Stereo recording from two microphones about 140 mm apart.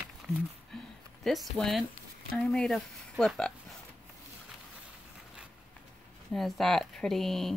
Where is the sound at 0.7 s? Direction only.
5° left (ahead or behind).